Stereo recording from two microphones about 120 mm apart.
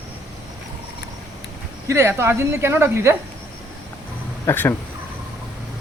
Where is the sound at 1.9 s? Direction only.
20° right (ahead or behind).